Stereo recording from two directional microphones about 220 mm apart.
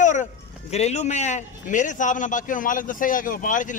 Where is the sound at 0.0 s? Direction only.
35° left (ahead or behind).